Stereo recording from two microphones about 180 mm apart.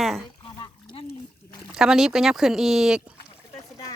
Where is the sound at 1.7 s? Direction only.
Centre (ahead or behind).